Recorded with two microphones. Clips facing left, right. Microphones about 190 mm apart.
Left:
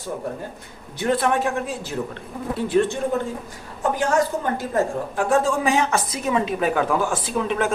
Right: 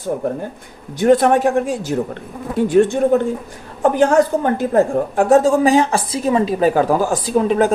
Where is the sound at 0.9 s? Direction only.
45° right (ahead or behind).